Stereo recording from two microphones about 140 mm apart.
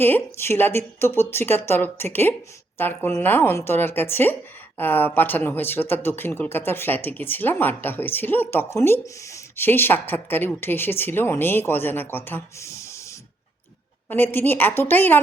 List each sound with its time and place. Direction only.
0.0 s speech: 15° left (ahead or behind)